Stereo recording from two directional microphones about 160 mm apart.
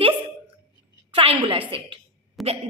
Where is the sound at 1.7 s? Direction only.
35° right (ahead or behind).